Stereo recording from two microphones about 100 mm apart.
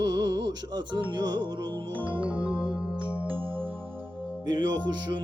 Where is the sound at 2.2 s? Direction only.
10° right (ahead or behind).